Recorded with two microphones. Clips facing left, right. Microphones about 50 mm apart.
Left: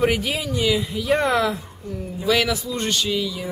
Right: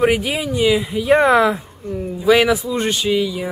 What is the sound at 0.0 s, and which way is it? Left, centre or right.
Speech, centre.